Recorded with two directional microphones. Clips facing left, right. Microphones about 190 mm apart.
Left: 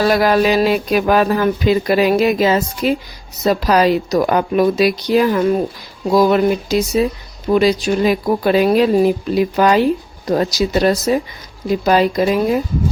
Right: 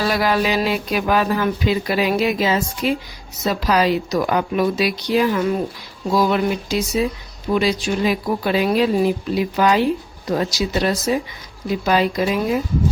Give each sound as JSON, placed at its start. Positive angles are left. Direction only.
{"t": 0.0, "sound": "speech", "side_deg": 45}